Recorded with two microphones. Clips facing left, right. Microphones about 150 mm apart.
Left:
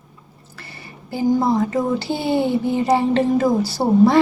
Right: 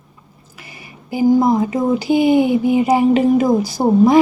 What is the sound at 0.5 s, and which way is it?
Speech, 15° right (ahead or behind).